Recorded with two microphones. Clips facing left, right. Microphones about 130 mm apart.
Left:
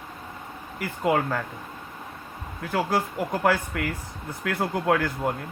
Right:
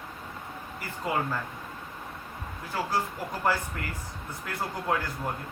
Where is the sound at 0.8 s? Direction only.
70° left (ahead or behind).